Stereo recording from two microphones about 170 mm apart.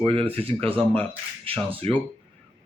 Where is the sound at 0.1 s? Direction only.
35° right (ahead or behind).